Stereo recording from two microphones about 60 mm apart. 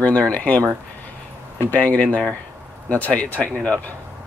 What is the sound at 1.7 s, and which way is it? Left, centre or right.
Speech, left.